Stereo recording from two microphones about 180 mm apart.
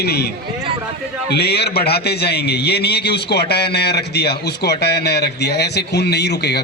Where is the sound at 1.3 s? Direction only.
65° left (ahead or behind).